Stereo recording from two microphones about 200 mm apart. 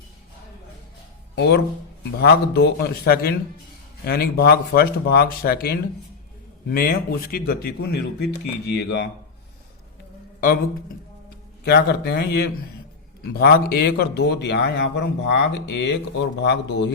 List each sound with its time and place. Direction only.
1.4 s a man's voice: 55° left (ahead or behind)
11.6 s a man's voice: 55° left (ahead or behind)